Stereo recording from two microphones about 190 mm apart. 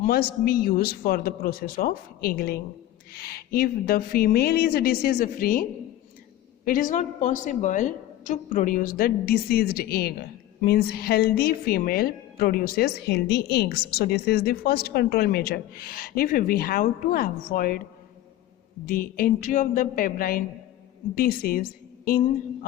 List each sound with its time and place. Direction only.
0.0 s a woman's voice: 55° left (ahead or behind)
6.7 s a woman's voice: 45° left (ahead or behind)
18.9 s a woman's voice: 50° left (ahead or behind)